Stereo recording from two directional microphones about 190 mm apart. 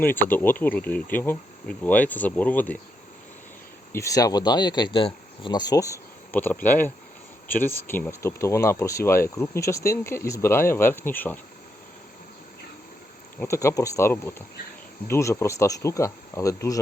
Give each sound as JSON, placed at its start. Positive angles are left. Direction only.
{"t": 0.0, "sound": "speech", "side_deg": 10}
{"t": 3.9, "sound": "speech", "side_deg": 15}
{"t": 13.4, "sound": "speech", "side_deg": 15}